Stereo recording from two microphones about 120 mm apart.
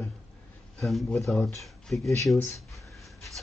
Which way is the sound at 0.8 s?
Centre (ahead or behind).